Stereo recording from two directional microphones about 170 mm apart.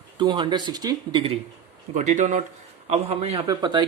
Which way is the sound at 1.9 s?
45° right (ahead or behind).